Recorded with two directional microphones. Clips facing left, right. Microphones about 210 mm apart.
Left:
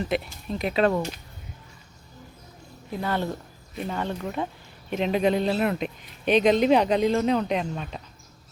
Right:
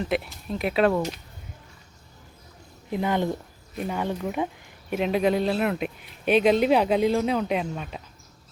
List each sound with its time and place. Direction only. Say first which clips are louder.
0.0 s speech: even; centre (ahead or behind)
2.9 s speech: right 3 dB; 15° right (ahead or behind)